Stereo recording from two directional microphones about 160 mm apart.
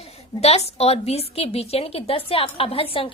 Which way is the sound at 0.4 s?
40° left (ahead or behind).